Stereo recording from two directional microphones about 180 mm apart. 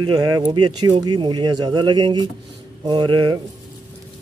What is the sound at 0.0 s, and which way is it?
Speech, 20° right (ahead or behind).